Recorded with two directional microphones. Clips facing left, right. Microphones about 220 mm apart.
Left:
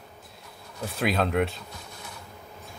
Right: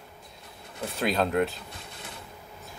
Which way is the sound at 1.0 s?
Centre (ahead or behind).